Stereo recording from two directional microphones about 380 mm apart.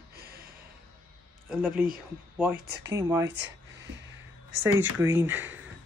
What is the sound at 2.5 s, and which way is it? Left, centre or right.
Speech, right.